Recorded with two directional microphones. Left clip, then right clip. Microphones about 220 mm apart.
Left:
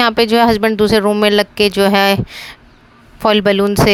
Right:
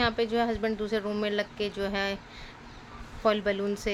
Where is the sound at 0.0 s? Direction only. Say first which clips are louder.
Left 15 dB; 50° left (ahead or behind).